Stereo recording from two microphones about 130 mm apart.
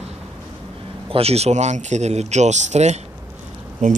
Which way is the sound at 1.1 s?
50° right (ahead or behind).